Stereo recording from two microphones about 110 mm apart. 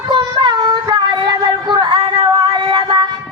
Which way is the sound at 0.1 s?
45° right (ahead or behind).